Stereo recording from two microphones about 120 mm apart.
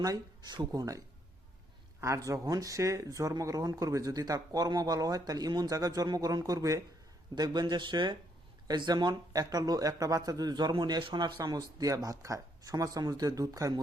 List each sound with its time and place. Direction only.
0.0 s speech: 30° right (ahead or behind)